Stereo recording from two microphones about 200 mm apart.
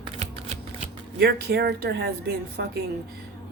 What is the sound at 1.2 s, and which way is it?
Speech, 50° right (ahead or behind).